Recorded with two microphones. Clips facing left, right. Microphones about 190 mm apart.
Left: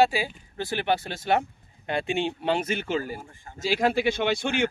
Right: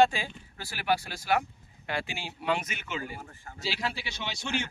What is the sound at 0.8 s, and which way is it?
Speech, 25° left (ahead or behind).